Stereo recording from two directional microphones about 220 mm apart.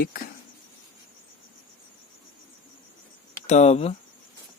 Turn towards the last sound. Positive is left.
turn(degrees=30)  # may be behind; listen again after turning